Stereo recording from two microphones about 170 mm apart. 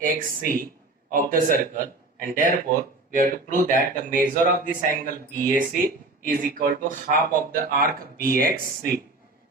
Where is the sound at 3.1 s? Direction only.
55° right (ahead or behind).